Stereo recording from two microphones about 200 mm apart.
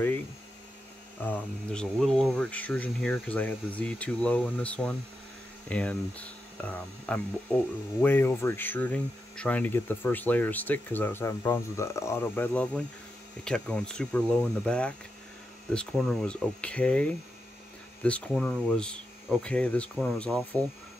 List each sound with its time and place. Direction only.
1.2 s speech: 5° left (ahead or behind)